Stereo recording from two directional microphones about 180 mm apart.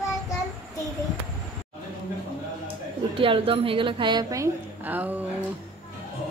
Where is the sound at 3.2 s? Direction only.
30° right (ahead or behind); by 5.2 s 10° right (ahead or behind).